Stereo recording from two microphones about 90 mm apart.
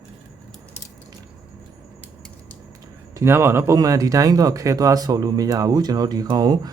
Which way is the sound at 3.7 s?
40° right (ahead or behind).